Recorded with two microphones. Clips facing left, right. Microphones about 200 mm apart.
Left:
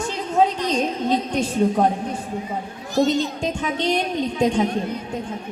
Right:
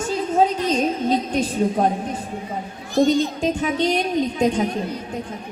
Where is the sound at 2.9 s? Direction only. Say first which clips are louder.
Right 2 dB; 45° right (ahead or behind).